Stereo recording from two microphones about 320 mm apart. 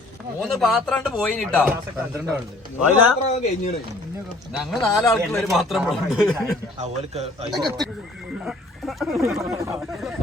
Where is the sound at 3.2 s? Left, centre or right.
Centre.